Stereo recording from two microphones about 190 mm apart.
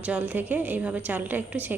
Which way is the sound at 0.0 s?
10° right (ahead or behind).